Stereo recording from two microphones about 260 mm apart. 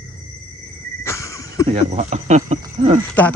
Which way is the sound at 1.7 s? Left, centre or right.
Right.